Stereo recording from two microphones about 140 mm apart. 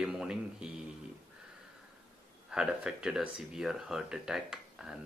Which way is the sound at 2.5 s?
5° right (ahead or behind).